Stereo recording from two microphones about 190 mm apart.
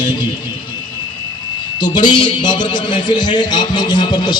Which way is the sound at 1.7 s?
25° left (ahead or behind).